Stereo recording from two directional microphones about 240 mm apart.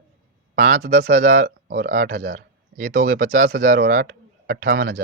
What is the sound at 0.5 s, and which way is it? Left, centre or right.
Speech, right.